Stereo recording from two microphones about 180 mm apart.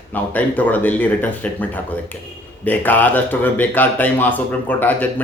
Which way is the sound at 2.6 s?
10° left (ahead or behind).